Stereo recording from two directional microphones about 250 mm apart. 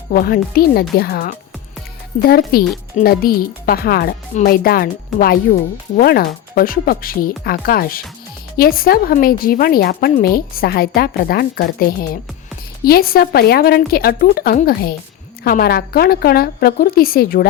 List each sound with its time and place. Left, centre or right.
0.1 s a woman's voice: left